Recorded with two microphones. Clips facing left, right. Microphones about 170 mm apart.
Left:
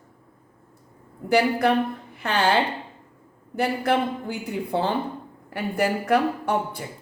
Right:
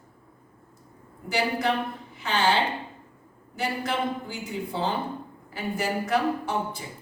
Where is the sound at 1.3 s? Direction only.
60° left (ahead or behind).